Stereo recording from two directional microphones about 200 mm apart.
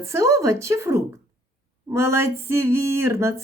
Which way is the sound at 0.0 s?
15° right (ahead or behind).